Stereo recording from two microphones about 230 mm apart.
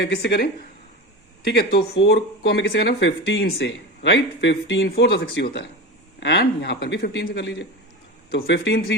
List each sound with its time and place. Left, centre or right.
0.0 s speech: left